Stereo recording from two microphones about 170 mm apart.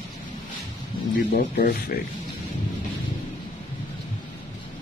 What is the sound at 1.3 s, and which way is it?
Speech, 55° left (ahead or behind).